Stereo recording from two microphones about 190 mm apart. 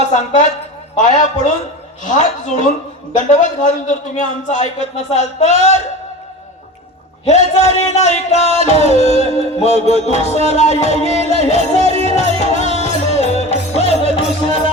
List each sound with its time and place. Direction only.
0.9 s a man's voice: 40° left (ahead or behind)
7.3 s a man's voice: 35° left (ahead or behind)
9.0 s music: 35° left (ahead or behind)
9.9 s a man's voice: 35° left (ahead or behind)
11.8 s music: 30° right (ahead or behind)
12.0 s music: 35° left (ahead or behind)